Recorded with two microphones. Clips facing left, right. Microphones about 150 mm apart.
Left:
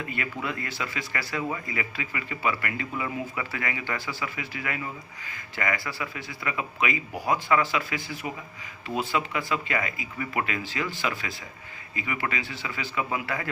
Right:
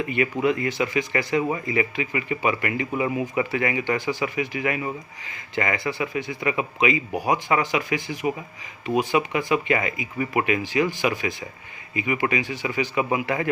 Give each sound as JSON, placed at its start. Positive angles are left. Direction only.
{"t": 0.4, "sound": "speech", "side_deg": -20}